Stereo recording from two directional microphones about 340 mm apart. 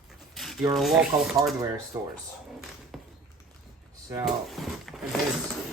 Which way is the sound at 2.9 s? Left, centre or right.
Centre.